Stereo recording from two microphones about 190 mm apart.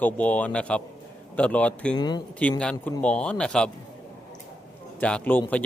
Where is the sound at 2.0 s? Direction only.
20° left (ahead or behind).